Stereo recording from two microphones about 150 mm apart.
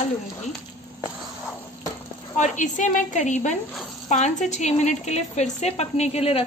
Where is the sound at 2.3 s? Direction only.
55° left (ahead or behind).